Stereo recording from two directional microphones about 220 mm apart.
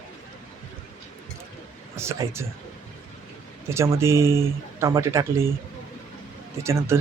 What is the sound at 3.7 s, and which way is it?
Speech, 10° right (ahead or behind).